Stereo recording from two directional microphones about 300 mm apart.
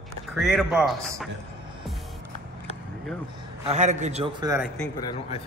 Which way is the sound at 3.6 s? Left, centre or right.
Right.